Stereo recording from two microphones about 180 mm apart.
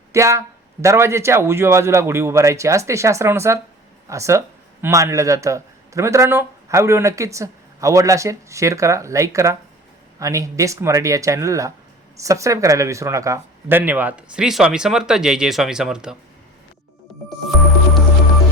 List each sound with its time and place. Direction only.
0.1 s a man's voice: 15° right (ahead or behind)
17.2 s music: centre (ahead or behind)